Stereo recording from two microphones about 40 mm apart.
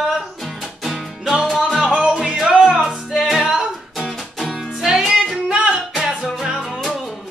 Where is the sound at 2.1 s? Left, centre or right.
Centre.